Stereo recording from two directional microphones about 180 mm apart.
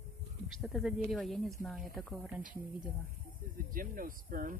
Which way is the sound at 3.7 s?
50° right (ahead or behind).